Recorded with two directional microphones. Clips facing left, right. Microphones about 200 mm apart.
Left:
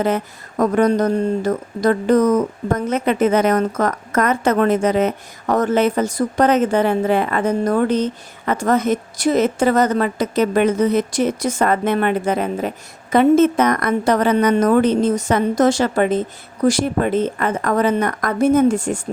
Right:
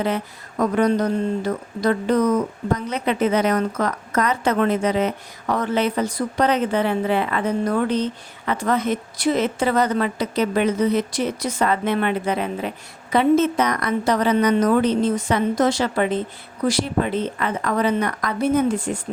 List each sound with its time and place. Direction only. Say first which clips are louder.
0.0 s speech: left 4 dB; 45° left (ahead or behind)